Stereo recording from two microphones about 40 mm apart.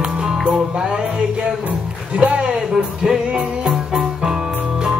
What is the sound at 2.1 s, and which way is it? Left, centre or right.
Speech, right.